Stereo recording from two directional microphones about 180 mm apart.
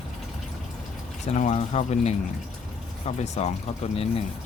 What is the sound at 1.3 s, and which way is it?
Speech, 40° left (ahead or behind).